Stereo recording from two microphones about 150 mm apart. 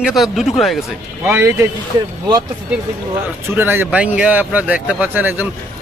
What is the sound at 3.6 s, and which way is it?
A man's voice, 15° right (ahead or behind).